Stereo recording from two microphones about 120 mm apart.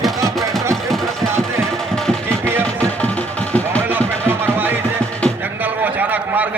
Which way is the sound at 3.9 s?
15° right (ahead or behind).